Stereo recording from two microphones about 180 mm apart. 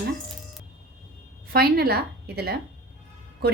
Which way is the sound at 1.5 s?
60° right (ahead or behind).